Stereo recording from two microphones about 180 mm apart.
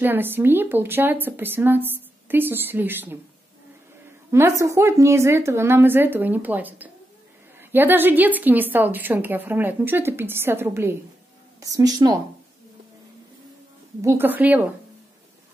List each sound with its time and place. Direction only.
0.0 s a woman's voice: 10° right (ahead or behind)
4.3 s a woman's voice: 15° right (ahead or behind)
14.0 s a woman's voice: 10° right (ahead or behind)